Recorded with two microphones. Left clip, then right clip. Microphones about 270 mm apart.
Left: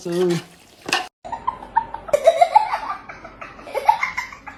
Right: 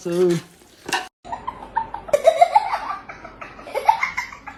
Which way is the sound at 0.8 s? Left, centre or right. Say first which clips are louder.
Left 2 dB; centre.